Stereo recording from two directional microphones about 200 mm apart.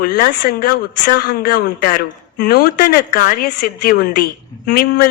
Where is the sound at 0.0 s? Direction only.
50° left (ahead or behind).